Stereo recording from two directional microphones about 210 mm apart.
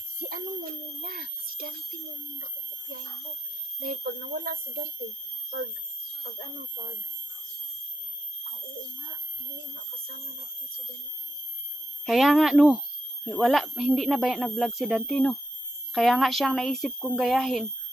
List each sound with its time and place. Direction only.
0.3 s a sound: 45° right (ahead or behind)
3.8 s speech: 45° right (ahead or behind)
12.0 s speech: centre (ahead or behind)